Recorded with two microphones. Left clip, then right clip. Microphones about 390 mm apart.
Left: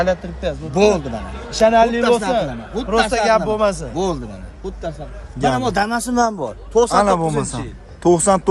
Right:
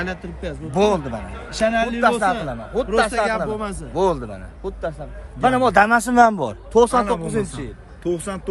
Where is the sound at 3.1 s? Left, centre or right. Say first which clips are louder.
Left 5 dB; centre.